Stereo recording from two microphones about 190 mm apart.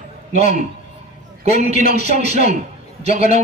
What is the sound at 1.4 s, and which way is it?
A man's voice, 35° right (ahead or behind).